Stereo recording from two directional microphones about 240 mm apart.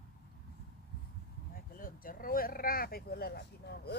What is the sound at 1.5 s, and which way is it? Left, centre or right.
Speech, left.